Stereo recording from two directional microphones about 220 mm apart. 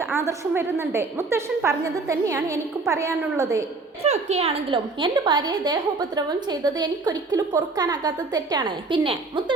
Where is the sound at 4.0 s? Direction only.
30° right (ahead or behind).